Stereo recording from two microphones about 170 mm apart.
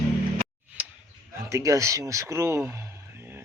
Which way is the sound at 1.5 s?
20° right (ahead or behind).